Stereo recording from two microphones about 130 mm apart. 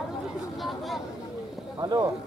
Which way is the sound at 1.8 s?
35° right (ahead or behind).